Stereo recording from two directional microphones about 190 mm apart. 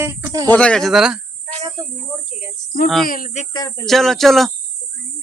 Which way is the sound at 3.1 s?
40° left (ahead or behind).